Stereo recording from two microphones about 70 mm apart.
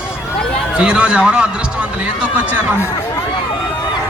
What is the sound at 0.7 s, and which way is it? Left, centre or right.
Speech, centre.